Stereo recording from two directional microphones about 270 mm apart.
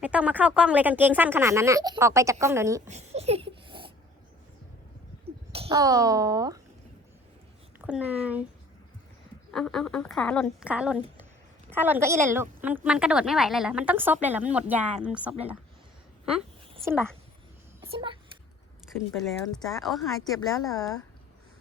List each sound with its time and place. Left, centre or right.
0.0 s speech: centre
2.8 s a sound: right
5.2 s a child's voice: right
7.8 s a woman's voice: centre
9.5 s a woman's voice: centre
16.8 s a child's voice: centre
19.1 s a woman's voice: centre